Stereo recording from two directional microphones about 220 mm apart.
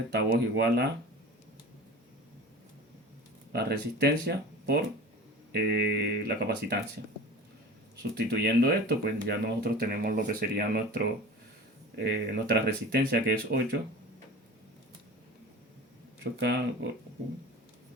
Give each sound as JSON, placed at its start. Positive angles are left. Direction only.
{"t": 0.1, "sound": "speech", "side_deg": -50}
{"t": 3.5, "sound": "speech", "side_deg": -45}
{"t": 8.1, "sound": "speech", "side_deg": -45}
{"t": 16.2, "sound": "speech", "side_deg": -50}